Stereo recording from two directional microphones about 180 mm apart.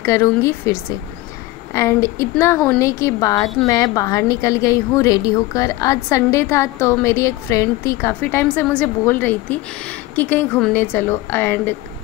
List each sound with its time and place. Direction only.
0.0 s a woman's voice: 15° left (ahead or behind)